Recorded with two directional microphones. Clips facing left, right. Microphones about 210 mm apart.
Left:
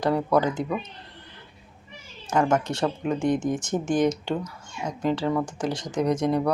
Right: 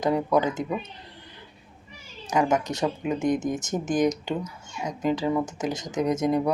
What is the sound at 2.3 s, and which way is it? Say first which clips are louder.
Speech: left 1 dB; 15° right (ahead or behind).